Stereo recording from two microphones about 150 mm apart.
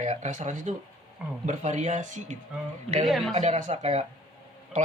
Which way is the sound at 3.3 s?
50° right (ahead or behind).